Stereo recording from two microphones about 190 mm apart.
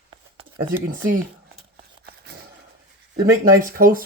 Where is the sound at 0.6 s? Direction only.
50° right (ahead or behind).